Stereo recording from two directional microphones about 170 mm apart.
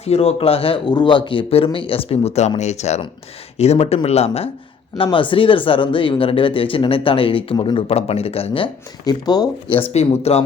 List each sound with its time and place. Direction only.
0.0 s speech: 35° left (ahead or behind)
9.9 s speech: 40° left (ahead or behind)